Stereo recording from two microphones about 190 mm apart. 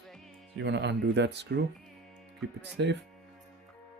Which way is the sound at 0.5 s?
70° right (ahead or behind).